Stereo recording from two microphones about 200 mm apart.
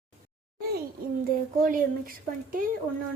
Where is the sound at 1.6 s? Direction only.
45° right (ahead or behind).